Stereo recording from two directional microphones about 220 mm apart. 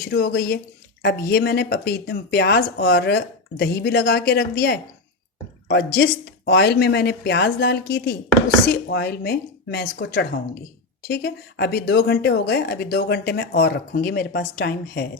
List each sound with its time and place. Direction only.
0.1 s speech: 45° left (ahead or behind)